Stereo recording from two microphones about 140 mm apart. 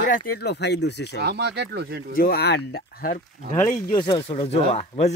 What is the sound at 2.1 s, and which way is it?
Speech, 90° left.